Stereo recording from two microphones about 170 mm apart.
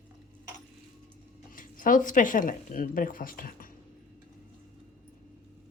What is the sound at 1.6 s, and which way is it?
Speech, 55° left (ahead or behind).